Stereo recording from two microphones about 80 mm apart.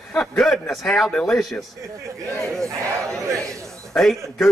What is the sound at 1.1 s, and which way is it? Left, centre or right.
Music, centre.